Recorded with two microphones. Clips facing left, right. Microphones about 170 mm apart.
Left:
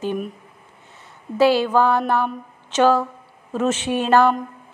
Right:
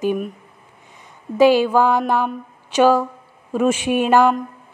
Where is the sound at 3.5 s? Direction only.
10° right (ahead or behind).